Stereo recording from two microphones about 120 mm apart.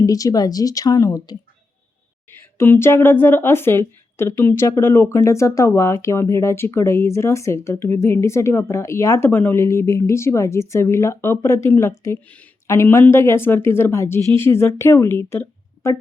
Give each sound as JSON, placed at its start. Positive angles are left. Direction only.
{"t": 0.0, "sound": "speech", "side_deg": 30}
{"t": 2.4, "sound": "speech", "side_deg": 20}